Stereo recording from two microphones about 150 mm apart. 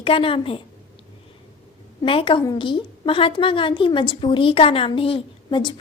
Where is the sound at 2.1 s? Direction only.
35° left (ahead or behind).